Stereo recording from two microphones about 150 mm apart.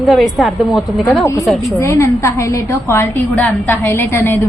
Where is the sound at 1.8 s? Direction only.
20° left (ahead or behind).